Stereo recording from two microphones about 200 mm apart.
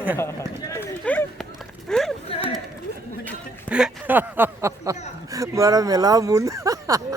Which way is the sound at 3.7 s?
5° right (ahead or behind).